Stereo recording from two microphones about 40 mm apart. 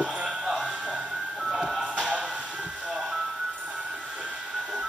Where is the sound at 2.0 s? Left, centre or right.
Right.